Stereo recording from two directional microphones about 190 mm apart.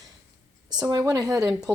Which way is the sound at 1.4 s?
5° right (ahead or behind).